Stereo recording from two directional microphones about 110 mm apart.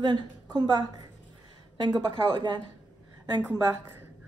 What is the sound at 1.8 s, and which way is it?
Speech, 45° right (ahead or behind).